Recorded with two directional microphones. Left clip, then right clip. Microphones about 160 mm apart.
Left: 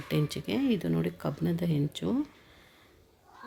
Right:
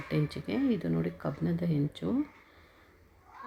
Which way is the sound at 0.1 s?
10° left (ahead or behind).